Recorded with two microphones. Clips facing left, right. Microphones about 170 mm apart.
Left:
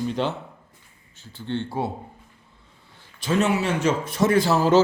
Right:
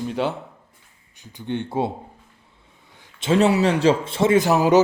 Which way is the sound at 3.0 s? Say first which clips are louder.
Right 5 dB; 25° right (ahead or behind).